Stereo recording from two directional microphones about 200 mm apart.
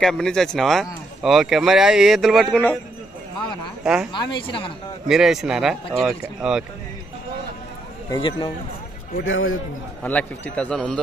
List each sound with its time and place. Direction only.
0.0 s speech: 5° left (ahead or behind)
3.8 s speech: 5° right (ahead or behind)
4.1 s a woman's voice: 25° left (ahead or behind)
5.0 s speech: centre (ahead or behind)
8.1 s a woman's voice: 25° left (ahead or behind)
9.2 s a man's voice: 75° left (ahead or behind)
10.0 s a man's voice: 10° left (ahead or behind)